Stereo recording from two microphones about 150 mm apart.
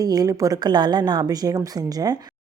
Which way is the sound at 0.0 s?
25° right (ahead or behind).